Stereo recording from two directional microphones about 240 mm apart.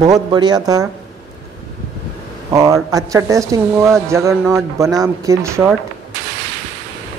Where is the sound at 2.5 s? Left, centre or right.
Centre.